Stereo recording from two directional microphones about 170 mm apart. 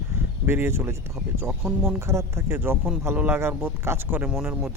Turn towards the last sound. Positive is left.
turn(degrees=-5)  # may be behind; listen again after turning